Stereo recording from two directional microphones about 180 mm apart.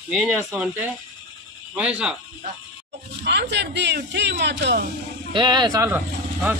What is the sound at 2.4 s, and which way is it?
Speech, 50° right (ahead or behind).